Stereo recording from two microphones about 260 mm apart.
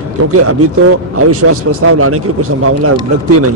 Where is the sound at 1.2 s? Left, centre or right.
Right.